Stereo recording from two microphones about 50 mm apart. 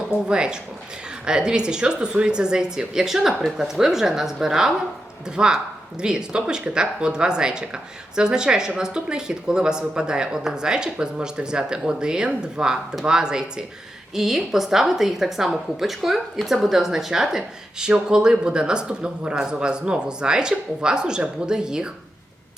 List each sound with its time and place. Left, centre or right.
0.3 s a woman's voice: centre